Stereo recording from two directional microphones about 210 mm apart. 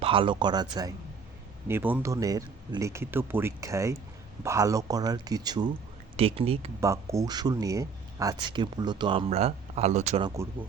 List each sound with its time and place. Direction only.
0.0 s speech: 25° right (ahead or behind)
6.7 s speech: 15° right (ahead or behind); by 10.2 s 35° right (ahead or behind)
10.2 s speech: 15° right (ahead or behind)